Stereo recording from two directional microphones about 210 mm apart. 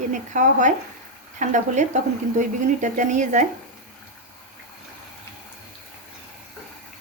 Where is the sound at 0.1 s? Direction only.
35° right (ahead or behind).